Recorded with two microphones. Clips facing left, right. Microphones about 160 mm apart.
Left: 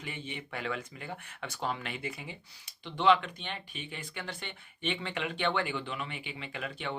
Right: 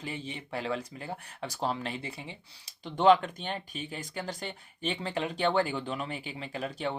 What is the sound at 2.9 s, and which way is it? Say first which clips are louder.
Speech: right 4 dB; 45° right (ahead or behind).